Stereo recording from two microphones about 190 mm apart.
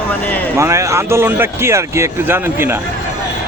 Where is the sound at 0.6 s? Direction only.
15° right (ahead or behind).